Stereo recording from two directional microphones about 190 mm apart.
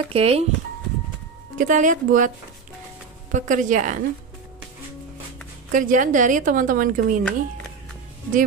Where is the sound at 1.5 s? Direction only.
45° right (ahead or behind).